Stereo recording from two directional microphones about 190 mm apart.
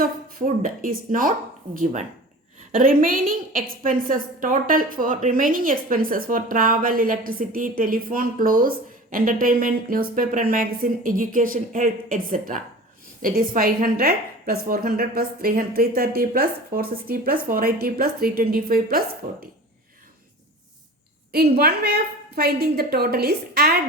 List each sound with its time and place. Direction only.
0.0 s a woman's voice: 50° right (ahead or behind)
21.3 s a woman's voice: 55° right (ahead or behind)